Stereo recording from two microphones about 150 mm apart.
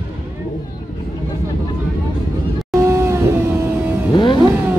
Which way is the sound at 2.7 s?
20° right (ahead or behind).